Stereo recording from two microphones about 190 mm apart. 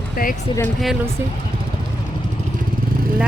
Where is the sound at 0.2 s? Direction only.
50° left (ahead or behind).